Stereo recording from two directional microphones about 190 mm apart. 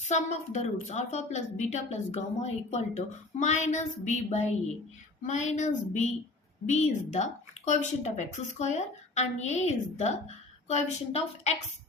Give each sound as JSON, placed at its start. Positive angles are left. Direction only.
{"t": 0.0, "sound": "speech", "side_deg": 35}